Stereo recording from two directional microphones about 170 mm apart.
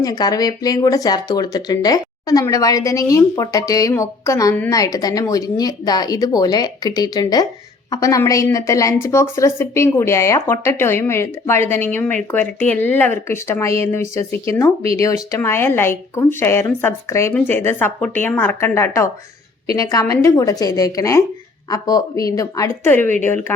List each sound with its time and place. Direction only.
0.0 s speech: 20° left (ahead or behind)